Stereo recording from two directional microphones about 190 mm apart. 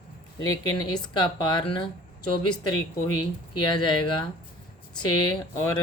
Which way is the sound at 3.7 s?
25° left (ahead or behind).